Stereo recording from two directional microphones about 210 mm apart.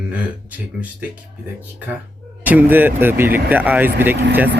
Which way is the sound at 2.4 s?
10° right (ahead or behind).